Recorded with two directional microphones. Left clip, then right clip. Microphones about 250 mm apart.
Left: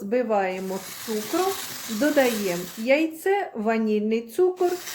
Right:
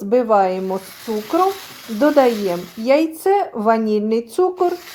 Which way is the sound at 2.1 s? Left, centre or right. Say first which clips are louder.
Right 6 dB; right.